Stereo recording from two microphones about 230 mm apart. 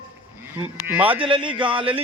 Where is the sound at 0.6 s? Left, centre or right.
Centre.